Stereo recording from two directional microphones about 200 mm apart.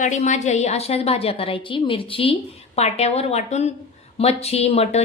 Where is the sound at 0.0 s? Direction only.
35° left (ahead or behind).